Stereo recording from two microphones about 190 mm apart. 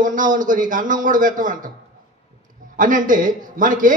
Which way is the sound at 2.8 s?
45° right (ahead or behind).